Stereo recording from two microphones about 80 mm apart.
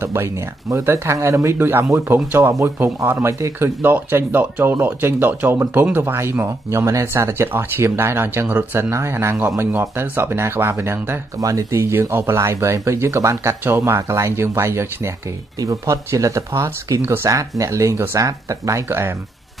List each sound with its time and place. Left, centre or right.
0.0 s speech: right
11.3 s speech: right
18.9 s speech: right